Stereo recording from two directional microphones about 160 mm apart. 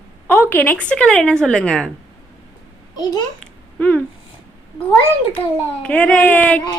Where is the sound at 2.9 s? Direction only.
25° left (ahead or behind).